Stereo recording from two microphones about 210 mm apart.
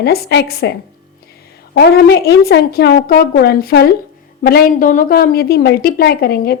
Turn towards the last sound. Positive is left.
turn(degrees=45)  # may be behind; listen again after turning